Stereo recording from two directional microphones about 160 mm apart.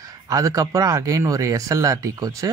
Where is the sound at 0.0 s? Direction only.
20° right (ahead or behind).